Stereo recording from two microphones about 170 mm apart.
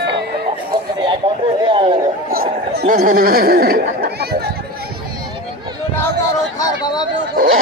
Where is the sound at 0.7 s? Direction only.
25° right (ahead or behind).